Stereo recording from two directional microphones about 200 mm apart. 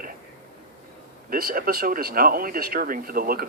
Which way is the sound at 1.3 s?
45° right (ahead or behind).